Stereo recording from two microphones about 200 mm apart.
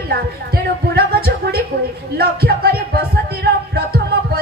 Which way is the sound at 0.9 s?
50° right (ahead or behind).